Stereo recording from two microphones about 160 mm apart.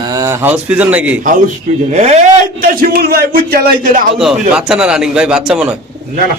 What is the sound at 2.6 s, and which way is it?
A man's voice, 65° right (ahead or behind).